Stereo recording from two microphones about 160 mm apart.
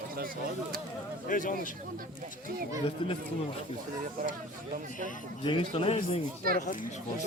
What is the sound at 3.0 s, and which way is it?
Speech, 35° left (ahead or behind).